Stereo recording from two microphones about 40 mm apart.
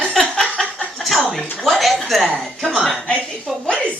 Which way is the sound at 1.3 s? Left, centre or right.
Centre.